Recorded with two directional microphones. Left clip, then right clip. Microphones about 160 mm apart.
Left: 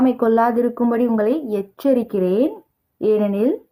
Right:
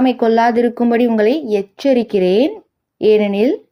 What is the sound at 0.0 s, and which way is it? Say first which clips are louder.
A woman's voice: right 3 dB; 5° right (ahead or behind).